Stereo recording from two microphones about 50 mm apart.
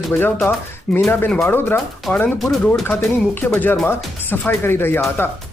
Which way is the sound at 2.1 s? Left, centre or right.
Centre.